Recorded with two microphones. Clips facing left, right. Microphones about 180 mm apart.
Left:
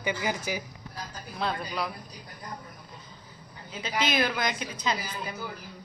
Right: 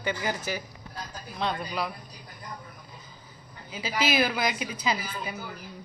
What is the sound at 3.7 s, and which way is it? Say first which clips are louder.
A woman's voice: right 2 dB; 5° right (ahead or behind).